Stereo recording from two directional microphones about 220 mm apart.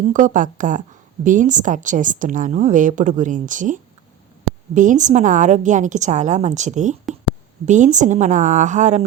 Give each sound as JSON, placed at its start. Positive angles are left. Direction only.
{"t": 0.1, "sound": "a woman's voice", "side_deg": -35}